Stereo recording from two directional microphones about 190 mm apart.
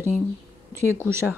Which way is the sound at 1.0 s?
10° right (ahead or behind).